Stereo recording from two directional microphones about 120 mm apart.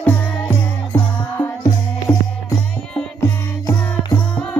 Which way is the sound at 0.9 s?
20° left (ahead or behind).